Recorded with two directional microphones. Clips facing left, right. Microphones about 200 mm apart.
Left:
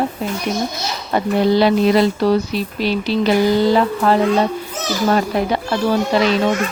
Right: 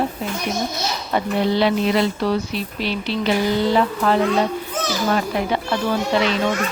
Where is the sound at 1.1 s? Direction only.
40° left (ahead or behind).